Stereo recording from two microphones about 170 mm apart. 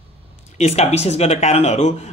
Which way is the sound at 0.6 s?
40° left (ahead or behind).